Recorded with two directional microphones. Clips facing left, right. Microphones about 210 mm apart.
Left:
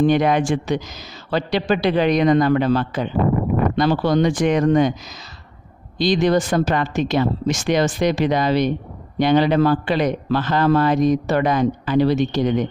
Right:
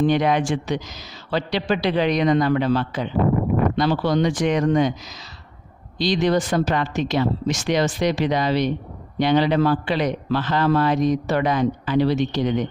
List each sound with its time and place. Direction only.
0.0 s a man's voice: 50° left (ahead or behind)
5.9 s a man's voice: 50° left (ahead or behind)